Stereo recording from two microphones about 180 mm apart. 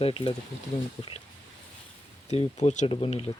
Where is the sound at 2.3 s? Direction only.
40° left (ahead or behind).